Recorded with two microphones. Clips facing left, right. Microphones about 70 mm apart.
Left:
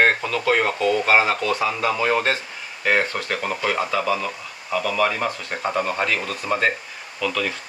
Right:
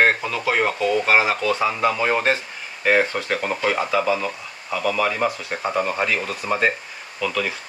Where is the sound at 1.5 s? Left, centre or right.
Right.